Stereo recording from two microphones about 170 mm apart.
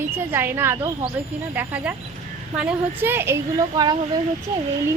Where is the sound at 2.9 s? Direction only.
10° right (ahead or behind).